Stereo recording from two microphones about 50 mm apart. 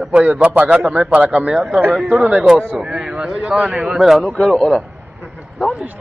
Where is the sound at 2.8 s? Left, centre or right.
Centre.